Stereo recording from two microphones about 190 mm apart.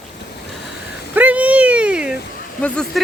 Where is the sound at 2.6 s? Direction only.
5° left (ahead or behind).